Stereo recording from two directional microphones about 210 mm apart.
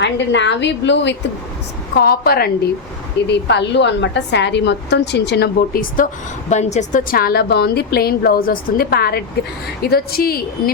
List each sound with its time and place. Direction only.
0.0 s a woman's voice: 55° left (ahead or behind)